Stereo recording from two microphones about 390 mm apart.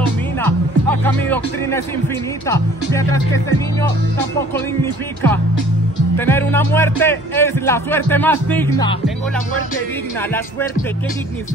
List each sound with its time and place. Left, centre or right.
0.4 s music: centre
2.4 s speech: centre
6.1 s a man's voice: centre